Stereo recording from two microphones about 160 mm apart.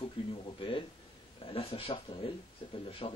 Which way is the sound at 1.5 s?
35° left (ahead or behind).